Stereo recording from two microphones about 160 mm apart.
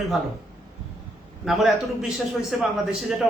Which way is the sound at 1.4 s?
Centre (ahead or behind).